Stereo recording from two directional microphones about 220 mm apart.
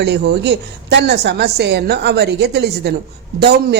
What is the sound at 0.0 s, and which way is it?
A woman's voice, 50° right (ahead or behind).